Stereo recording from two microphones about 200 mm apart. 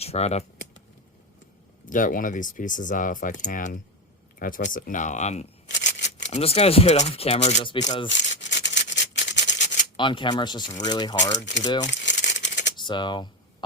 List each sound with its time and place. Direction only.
0.0 s speech: 30° left (ahead or behind)
1.9 s speech: 40° left (ahead or behind)
5.6 s a sound: 60° left (ahead or behind)
6.3 s speech: 30° left (ahead or behind)
8.1 s rub: 65° left (ahead or behind)
10.0 s speech: 25° left (ahead or behind)
11.9 s crumpling: 65° left (ahead or behind)
12.7 s speech: 20° left (ahead or behind)